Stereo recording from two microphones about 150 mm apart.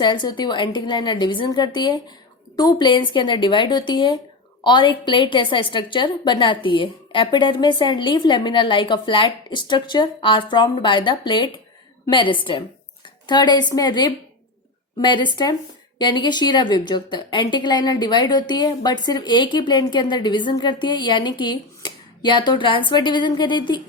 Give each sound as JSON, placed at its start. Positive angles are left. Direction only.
{"t": 0.0, "sound": "a woman's voice", "side_deg": 30}